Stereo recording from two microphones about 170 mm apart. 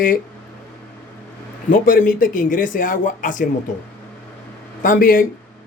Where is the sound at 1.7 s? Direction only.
55° left (ahead or behind).